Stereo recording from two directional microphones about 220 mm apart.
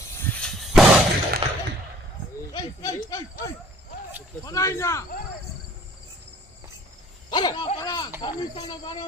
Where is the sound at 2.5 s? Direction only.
15° left (ahead or behind).